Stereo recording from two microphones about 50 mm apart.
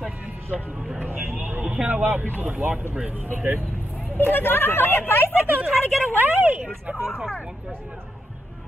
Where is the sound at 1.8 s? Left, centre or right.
Right.